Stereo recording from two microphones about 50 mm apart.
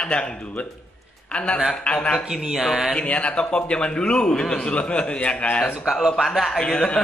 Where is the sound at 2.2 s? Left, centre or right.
Centre.